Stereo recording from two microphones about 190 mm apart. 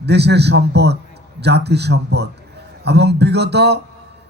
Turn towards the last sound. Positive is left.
turn(degrees=-60)  # may be behind; listen again after turning